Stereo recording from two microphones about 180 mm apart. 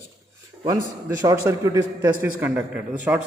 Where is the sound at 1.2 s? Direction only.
20° right (ahead or behind).